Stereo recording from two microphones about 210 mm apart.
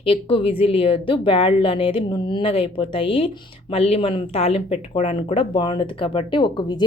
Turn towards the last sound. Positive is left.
turn(degrees=20)  # may be behind; listen again after turning